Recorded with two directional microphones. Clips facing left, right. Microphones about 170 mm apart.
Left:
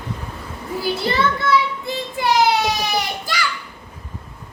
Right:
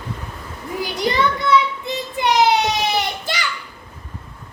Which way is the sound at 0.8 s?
15° right (ahead or behind).